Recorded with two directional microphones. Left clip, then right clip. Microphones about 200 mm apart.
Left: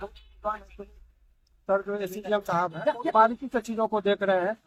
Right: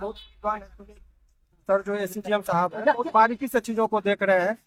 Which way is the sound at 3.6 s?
15° right (ahead or behind).